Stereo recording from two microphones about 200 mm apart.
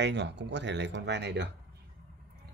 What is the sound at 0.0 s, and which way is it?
Speech, 60° right (ahead or behind).